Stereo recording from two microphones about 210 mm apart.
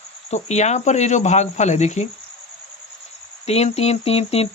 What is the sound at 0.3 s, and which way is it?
Speech, 30° left (ahead or behind).